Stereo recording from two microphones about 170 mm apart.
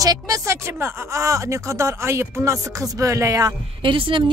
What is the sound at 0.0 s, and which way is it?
Speech, 20° right (ahead or behind).